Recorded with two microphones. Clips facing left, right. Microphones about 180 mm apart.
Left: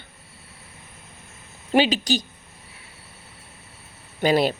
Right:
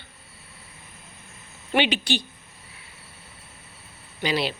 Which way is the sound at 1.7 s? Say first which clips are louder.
Left 4 dB; 40° left (ahead or behind).